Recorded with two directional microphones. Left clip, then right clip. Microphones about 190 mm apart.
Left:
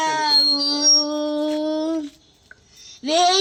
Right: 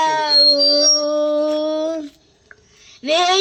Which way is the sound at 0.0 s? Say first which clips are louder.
Right 4 dB; 55° right (ahead or behind).